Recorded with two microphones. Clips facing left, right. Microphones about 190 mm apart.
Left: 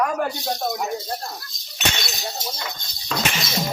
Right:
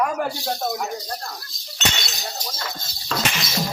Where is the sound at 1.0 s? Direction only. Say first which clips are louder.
Left 2 dB; 25° left (ahead or behind).